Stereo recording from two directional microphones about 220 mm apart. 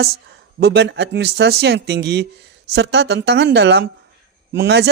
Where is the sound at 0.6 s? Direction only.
50° right (ahead or behind).